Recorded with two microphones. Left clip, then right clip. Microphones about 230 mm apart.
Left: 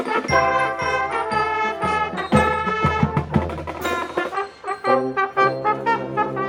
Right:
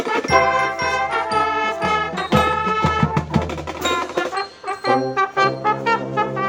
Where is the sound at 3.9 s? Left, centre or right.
Right.